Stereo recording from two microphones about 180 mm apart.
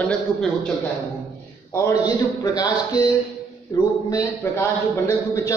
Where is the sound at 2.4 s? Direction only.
20° left (ahead or behind).